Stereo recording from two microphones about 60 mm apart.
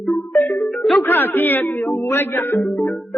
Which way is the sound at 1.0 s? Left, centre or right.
Left.